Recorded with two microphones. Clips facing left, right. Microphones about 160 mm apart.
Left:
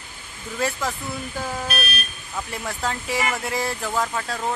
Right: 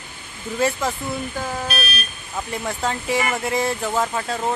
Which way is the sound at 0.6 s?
Centre (ahead or behind).